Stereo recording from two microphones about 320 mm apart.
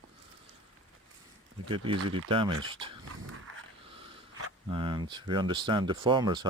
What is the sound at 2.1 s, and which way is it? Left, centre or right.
Speech, centre.